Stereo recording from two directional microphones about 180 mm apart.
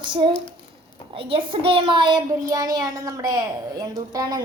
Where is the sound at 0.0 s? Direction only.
25° right (ahead or behind).